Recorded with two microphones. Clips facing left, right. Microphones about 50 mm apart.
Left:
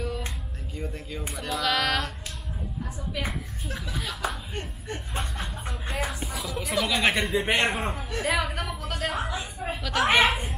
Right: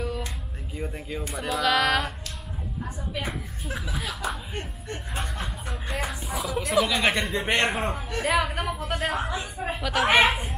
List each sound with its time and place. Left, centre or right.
0.7 s a sound: centre
1.3 s speech: centre
3.3 s chuckle: centre
6.2 s speech: centre
8.6 s a sound: centre
9.0 s a woman's voice: centre